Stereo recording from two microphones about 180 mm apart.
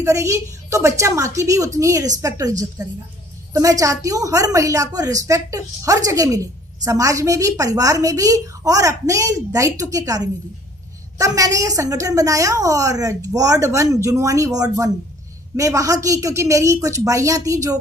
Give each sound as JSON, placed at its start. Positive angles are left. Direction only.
{"t": 0.0, "sound": "a woman's voice", "side_deg": -15}